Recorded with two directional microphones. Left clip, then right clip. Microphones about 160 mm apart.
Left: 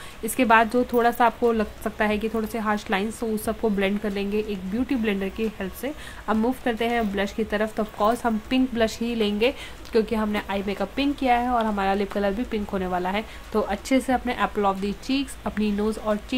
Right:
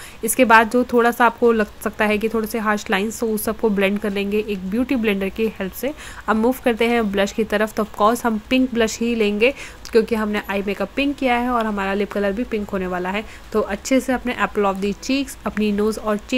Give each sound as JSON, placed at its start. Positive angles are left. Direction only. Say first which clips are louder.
{"t": 0.2, "sound": "a woman's voice", "louder": "right 5 dB", "side_deg": -25}